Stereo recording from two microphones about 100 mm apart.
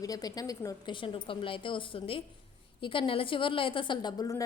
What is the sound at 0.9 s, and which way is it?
A woman's voice, 60° left (ahead or behind).